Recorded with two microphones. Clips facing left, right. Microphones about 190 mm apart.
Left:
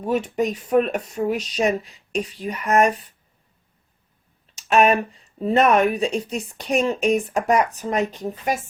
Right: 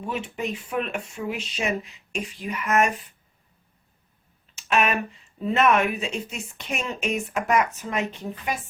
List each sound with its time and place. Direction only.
0.0 s a woman's voice: 40° left (ahead or behind)
4.7 s a woman's voice: 35° left (ahead or behind)